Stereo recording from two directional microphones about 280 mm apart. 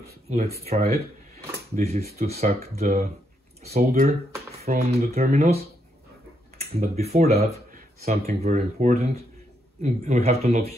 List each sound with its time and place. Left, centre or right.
0.0 s speech: right
1.8 s speech: right
6.6 s speech: right